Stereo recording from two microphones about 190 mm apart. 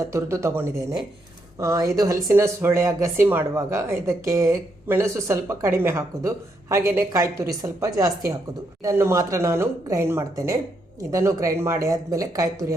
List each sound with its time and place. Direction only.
0.0 s speech: 15° right (ahead or behind)